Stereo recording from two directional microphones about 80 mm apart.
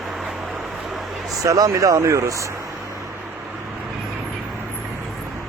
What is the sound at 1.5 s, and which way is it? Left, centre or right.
Speech, right.